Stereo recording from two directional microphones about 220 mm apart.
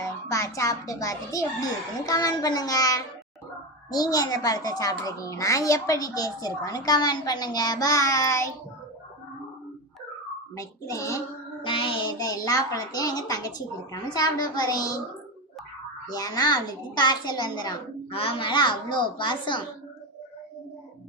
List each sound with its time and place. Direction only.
0.0 s a child's voice: 15° left (ahead or behind)
10.5 s a child's voice: 15° left (ahead or behind)
11.6 s child singing: 25° left (ahead or behind)
12.5 s a child's voice: 15° left (ahead or behind)
16.0 s a child's voice: 15° left (ahead or behind)